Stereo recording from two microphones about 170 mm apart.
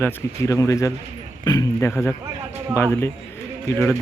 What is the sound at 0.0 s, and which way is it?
Speech, 15° left (ahead or behind).